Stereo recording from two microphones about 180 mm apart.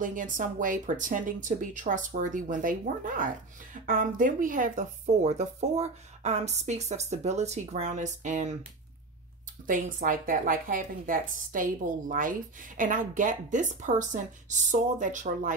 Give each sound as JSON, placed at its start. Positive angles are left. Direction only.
{"t": 0.0, "sound": "a woman's voice", "side_deg": -45}
{"t": 9.7, "sound": "a woman's voice", "side_deg": -50}